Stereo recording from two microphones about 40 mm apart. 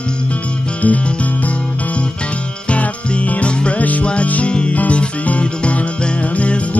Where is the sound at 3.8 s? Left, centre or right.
Left.